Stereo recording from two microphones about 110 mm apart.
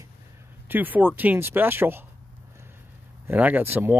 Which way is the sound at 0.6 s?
15° right (ahead or behind).